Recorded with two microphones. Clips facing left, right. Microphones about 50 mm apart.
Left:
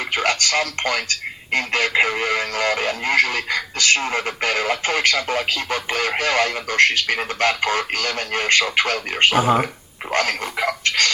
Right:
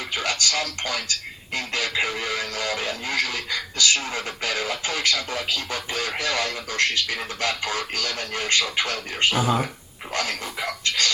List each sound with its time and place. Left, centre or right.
0.1 s speech: left